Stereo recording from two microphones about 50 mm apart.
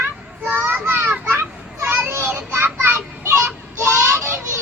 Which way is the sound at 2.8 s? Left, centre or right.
Right.